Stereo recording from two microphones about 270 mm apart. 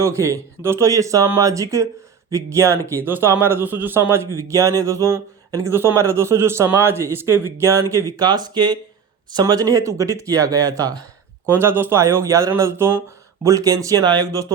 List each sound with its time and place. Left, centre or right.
0.0 s speech: centre